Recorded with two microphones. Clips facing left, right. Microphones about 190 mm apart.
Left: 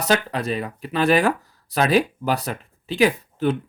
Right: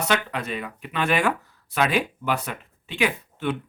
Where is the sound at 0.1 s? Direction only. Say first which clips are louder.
Left 8 dB; 35° left (ahead or behind).